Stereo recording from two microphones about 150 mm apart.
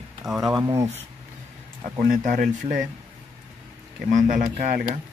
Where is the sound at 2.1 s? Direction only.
65° right (ahead or behind).